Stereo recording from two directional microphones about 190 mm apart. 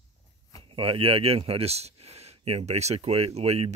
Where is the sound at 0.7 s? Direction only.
30° right (ahead or behind).